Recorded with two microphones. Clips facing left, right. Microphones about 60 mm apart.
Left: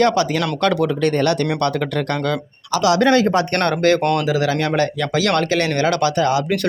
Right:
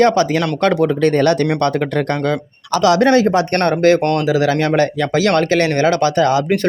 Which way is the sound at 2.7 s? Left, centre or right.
Right.